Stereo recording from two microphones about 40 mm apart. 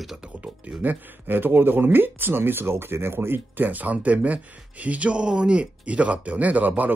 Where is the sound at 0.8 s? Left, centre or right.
Right.